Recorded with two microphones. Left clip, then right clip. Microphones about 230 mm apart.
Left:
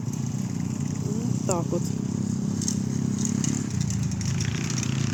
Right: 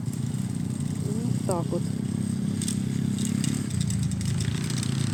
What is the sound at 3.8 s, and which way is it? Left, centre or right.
Vehicle, right.